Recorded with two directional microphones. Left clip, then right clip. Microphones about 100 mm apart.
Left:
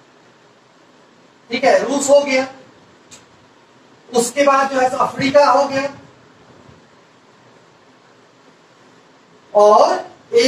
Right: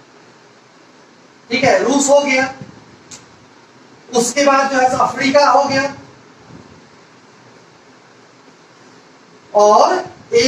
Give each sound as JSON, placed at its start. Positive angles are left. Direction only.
{"t": 1.5, "sound": "a woman's voice", "side_deg": -30}
{"t": 4.1, "sound": "speech", "side_deg": -30}
{"t": 9.5, "sound": "a sound", "side_deg": -30}